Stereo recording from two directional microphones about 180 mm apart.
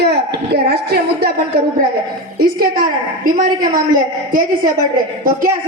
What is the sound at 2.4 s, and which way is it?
A woman's voice, 55° right (ahead or behind).